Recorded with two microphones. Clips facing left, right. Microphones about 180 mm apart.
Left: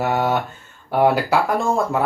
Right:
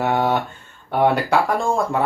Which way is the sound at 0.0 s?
Centre (ahead or behind).